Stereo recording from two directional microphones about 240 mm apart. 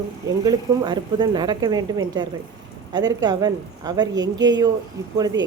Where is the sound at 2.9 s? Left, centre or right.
Centre.